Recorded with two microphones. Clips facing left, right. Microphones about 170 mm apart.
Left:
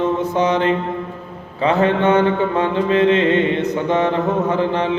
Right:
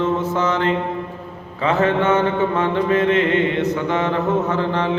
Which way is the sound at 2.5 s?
30° left (ahead or behind).